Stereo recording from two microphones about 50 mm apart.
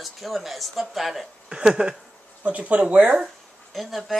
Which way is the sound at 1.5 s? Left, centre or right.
Centre.